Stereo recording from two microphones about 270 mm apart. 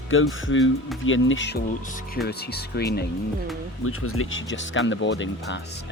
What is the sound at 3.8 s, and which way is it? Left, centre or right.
Speech, left.